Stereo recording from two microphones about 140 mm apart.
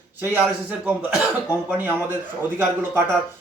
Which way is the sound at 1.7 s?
15° right (ahead or behind).